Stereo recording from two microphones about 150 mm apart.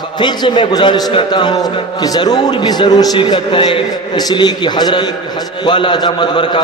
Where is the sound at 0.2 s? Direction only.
30° left (ahead or behind).